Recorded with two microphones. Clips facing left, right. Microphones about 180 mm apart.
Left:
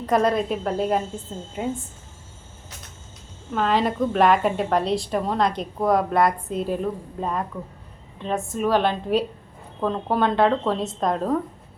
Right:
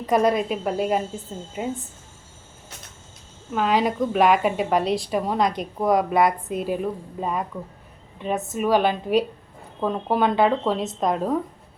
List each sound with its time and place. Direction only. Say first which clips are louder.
0.0 s a woman's voice: right 1 dB; 5° right (ahead or behind)
3.5 s a woman's voice: even; 5° right (ahead or behind)
8.5 s a woman's voice: right 1 dB; 5° right (ahead or behind)